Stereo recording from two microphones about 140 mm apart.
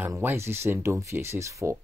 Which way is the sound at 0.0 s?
15° right (ahead or behind).